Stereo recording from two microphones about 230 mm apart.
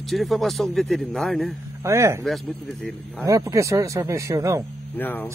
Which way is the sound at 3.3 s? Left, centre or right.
Centre.